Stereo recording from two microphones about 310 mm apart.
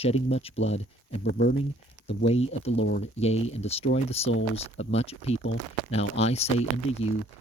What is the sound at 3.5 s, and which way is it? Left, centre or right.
Speech, centre.